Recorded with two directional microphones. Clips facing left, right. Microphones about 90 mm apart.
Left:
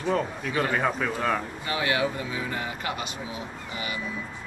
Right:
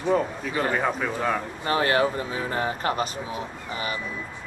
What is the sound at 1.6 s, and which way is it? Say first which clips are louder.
Speech: right 6 dB; 40° right (ahead or behind).